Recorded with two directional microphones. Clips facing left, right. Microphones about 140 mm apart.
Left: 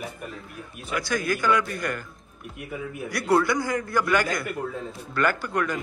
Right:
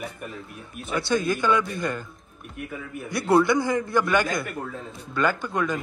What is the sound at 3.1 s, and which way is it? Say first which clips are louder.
Speech: right 3 dB; 25° right (ahead or behind).